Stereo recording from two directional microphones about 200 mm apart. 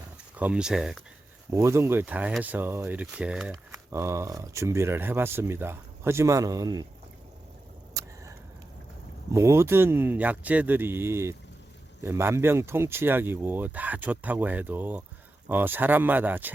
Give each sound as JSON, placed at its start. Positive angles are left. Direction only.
{"t": 0.3, "sound": "speech", "side_deg": -5}
{"t": 1.5, "sound": "speech", "side_deg": -15}
{"t": 8.0, "sound": "vehicle", "side_deg": -15}
{"t": 9.3, "sound": "speech", "side_deg": -15}